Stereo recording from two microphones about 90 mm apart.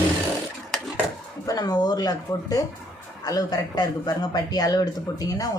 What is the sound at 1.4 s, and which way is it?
Speech, 45° left (ahead or behind).